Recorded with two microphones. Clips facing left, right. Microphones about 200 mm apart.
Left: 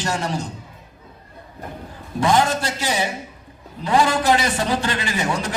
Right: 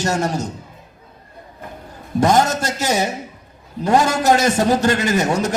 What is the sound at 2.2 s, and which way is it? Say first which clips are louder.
A man's voice: right 3 dB; 45° right (ahead or behind).